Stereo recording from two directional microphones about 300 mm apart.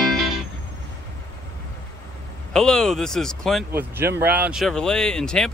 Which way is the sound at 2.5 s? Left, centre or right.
Centre.